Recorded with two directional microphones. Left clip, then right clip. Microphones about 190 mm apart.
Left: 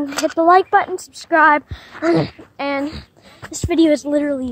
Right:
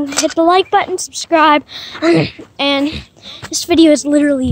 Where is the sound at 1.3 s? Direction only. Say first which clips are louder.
Right 2 dB; 10° right (ahead or behind).